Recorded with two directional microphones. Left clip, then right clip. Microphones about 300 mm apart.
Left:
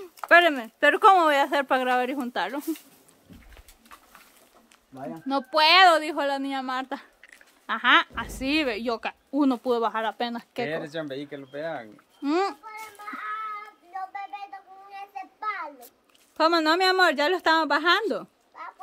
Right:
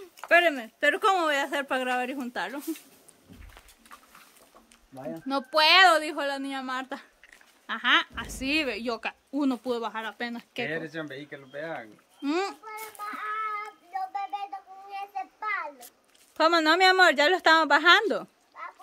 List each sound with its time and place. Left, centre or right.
0.0 s speech: centre
5.3 s a woman's voice: centre
10.7 s speech: left
12.2 s a woman's voice: centre
12.7 s child singing: right
14.1 s a sound: right
16.3 s a woman's voice: centre